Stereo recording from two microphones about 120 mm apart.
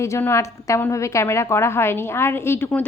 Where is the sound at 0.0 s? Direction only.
20° left (ahead or behind).